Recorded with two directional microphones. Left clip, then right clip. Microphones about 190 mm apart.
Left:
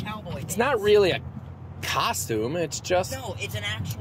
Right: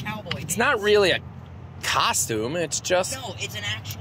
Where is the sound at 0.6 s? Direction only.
Centre (ahead or behind).